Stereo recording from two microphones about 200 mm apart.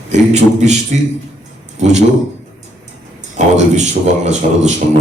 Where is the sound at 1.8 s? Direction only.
35° right (ahead or behind).